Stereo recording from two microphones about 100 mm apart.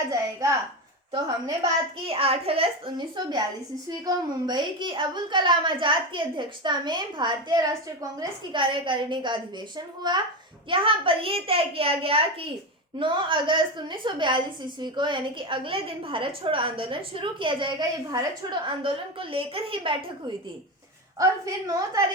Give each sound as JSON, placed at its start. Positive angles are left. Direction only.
{"t": 0.1, "sound": "a woman's voice", "side_deg": -30}
{"t": 2.0, "sound": "a child's voice", "side_deg": -75}
{"t": 3.8, "sound": "a woman's voice", "side_deg": -40}
{"t": 8.5, "sound": "a woman's voice", "side_deg": -55}
{"t": 10.7, "sound": "a child's voice", "side_deg": -60}
{"t": 13.0, "sound": "a woman's voice", "side_deg": -55}
{"t": 18.1, "sound": "a woman's voice", "side_deg": -40}
{"t": 18.6, "sound": "a woman's voice", "side_deg": -60}
{"t": 21.2, "sound": "a woman's voice", "side_deg": -35}